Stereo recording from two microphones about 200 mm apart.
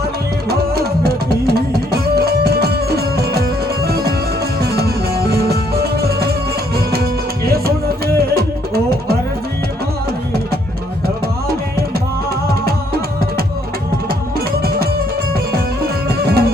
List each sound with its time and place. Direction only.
0.4 s music: 50° right (ahead or behind)
14.3 s music: 50° right (ahead or behind)
16.0 s music: 55° right (ahead or behind)